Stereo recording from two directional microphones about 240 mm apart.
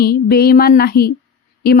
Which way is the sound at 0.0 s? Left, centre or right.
Left.